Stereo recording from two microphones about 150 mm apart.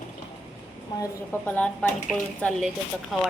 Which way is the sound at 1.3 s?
10° left (ahead or behind).